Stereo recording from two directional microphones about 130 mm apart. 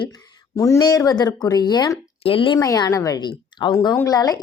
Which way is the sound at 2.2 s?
40° left (ahead or behind).